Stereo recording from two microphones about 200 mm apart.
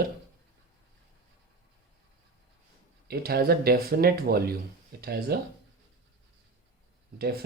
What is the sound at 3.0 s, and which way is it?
Speech, 50° right (ahead or behind).